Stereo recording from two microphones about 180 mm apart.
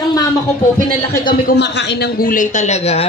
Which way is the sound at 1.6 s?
70° left (ahead or behind).